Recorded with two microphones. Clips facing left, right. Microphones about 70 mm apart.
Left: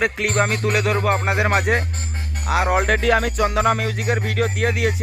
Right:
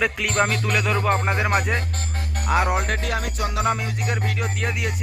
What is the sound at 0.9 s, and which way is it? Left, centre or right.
Music, left.